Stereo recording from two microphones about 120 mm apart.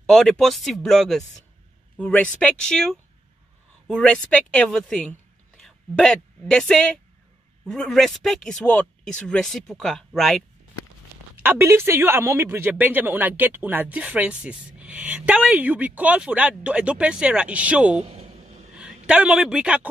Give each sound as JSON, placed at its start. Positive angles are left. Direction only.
{"t": 0.0, "sound": "speech", "side_deg": 5}
{"t": 11.4, "sound": "speech", "side_deg": -20}
{"t": 18.0, "sound": "a sound", "side_deg": -60}
{"t": 19.0, "sound": "speech", "side_deg": -5}